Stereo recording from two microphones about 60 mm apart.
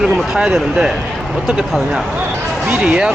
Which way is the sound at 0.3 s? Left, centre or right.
Centre.